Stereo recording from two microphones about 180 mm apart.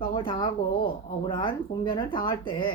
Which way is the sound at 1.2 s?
30° left (ahead or behind).